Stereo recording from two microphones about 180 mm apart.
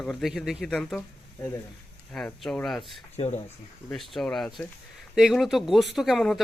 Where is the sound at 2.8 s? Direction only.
35° left (ahead or behind).